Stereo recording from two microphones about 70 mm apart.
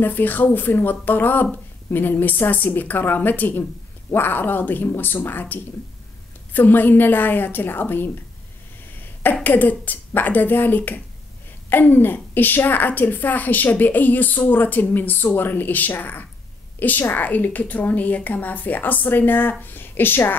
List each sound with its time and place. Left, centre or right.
0.0 s a woman's voice: left